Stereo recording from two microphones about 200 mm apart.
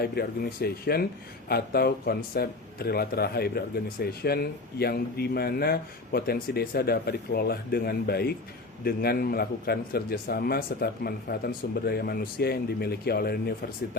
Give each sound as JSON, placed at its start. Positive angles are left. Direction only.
{"t": 0.0, "sound": "a man's voice", "side_deg": 50}